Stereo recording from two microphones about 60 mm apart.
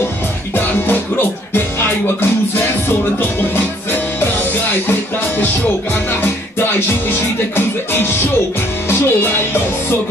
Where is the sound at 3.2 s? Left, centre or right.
Left.